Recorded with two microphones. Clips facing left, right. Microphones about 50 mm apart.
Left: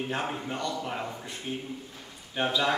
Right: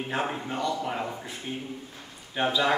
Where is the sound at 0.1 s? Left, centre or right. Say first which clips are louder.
Right 2 dB; centre.